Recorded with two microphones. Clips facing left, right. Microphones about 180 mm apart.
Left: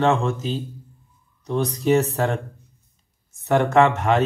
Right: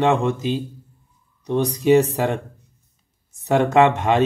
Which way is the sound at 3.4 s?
20° right (ahead or behind).